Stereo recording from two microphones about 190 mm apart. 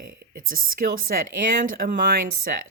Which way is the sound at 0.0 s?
45° right (ahead or behind).